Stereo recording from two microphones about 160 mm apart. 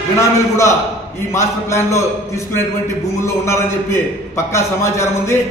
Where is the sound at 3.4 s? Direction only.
15° left (ahead or behind).